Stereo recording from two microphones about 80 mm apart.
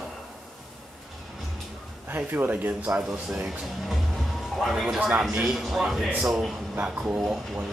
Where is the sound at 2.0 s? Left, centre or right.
Right.